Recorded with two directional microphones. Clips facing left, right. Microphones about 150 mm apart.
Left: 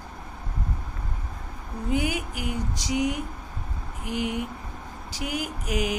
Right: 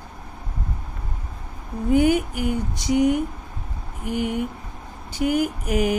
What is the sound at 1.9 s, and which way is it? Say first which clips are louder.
A woman's voice: right 9 dB; 55° right (ahead or behind).